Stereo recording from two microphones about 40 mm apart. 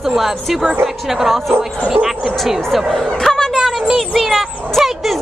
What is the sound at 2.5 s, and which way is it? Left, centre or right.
Speech, centre.